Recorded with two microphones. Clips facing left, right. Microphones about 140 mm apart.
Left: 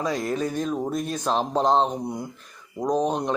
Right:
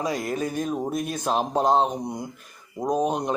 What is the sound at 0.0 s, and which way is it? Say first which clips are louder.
Speech: left 1 dB; 10° right (ahead or behind).